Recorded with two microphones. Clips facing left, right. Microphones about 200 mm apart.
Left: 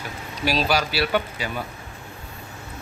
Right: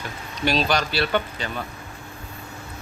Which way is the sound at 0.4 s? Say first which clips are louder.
Even; 5° left (ahead or behind).